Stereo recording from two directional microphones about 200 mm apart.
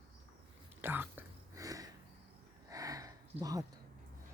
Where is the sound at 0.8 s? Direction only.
10° right (ahead or behind).